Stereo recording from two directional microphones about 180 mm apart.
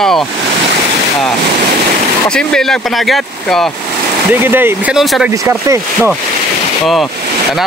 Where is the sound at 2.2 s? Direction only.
5° left (ahead or behind).